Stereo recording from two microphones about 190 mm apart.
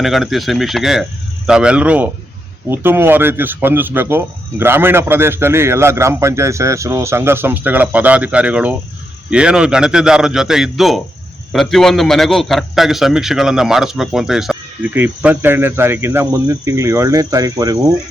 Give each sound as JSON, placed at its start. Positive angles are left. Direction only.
{"t": 0.0, "sound": "a man's voice", "side_deg": 0}